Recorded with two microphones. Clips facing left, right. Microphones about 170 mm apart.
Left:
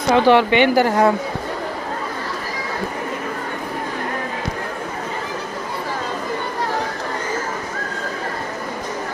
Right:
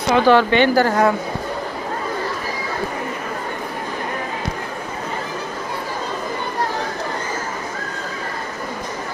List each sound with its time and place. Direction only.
0.1 s speech: 25° left (ahead or behind)